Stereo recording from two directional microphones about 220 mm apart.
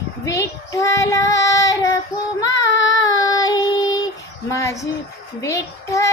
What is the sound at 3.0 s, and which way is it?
Child singing, 15° left (ahead or behind).